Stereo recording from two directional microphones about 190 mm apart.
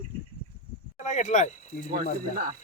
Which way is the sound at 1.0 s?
40° left (ahead or behind).